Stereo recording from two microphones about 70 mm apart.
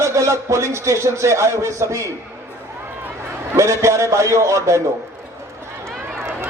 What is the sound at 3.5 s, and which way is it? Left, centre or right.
Speech, right.